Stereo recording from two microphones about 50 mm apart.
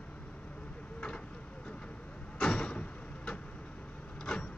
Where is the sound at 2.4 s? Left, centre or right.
Centre.